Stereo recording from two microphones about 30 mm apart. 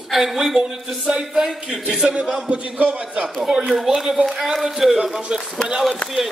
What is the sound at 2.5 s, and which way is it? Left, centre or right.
Speech, right.